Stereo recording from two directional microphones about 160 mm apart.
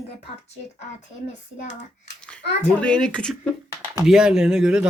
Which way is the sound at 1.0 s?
50° left (ahead or behind).